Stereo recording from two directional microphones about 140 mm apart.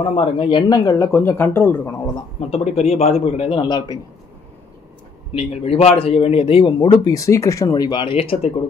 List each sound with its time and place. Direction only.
0.1 s speech: 40° left (ahead or behind); by 2.0 s 15° left (ahead or behind)
2.1 s speech: 45° left (ahead or behind)
5.3 s speech: 45° left (ahead or behind)